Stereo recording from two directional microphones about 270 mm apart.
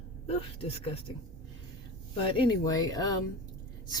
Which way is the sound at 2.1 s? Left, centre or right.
Centre.